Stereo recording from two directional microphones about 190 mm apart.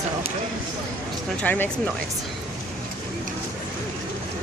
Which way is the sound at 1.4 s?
10° left (ahead or behind).